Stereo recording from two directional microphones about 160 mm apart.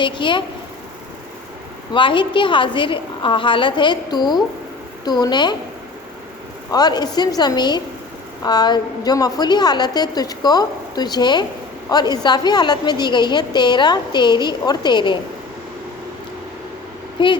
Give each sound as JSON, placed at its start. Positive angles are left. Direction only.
{"t": 0.0, "sound": "a woman's voice", "side_deg": 30}
{"t": 1.9, "sound": "a woman's voice", "side_deg": 30}
{"t": 6.7, "sound": "a woman's voice", "side_deg": 25}
{"t": 17.2, "sound": "a woman's voice", "side_deg": 30}